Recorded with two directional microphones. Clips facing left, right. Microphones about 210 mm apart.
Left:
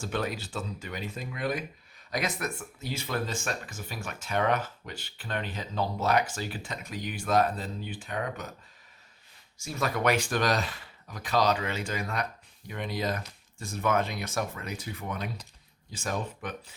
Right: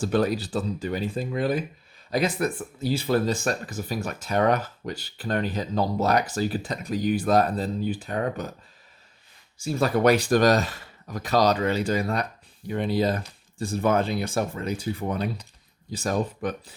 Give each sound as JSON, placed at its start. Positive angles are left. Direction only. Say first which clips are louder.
{"t": 0.0, "sound": "speech", "louder": "right 9 dB", "side_deg": -35}
{"t": 9.6, "sound": "speech", "louder": "right 8 dB", "side_deg": -30}